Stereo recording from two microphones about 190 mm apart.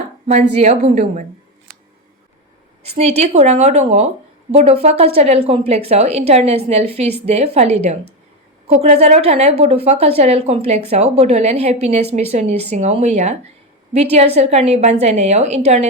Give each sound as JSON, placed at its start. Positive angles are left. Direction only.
{"t": 0.6, "sound": "a woman's voice", "side_deg": -35}
{"t": 3.0, "sound": "a woman's voice", "side_deg": -35}